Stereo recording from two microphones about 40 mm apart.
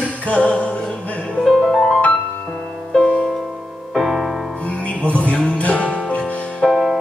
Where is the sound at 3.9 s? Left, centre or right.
Centre.